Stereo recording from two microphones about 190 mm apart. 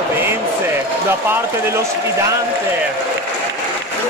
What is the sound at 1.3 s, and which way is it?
Speech, 15° right (ahead or behind).